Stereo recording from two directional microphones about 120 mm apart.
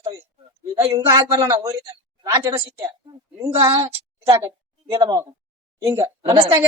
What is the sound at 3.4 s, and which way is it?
A woman's voice, 25° right (ahead or behind).